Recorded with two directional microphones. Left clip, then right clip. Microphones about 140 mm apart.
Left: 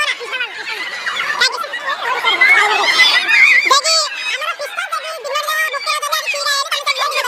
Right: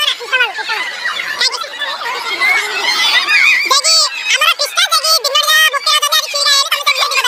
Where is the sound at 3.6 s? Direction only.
10° left (ahead or behind).